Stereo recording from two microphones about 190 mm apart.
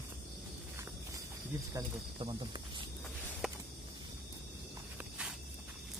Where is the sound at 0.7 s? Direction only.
15° right (ahead or behind).